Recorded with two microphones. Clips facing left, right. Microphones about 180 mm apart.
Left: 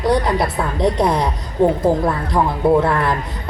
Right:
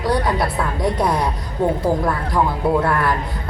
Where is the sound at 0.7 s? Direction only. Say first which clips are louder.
Left 4 dB; 20° left (ahead or behind).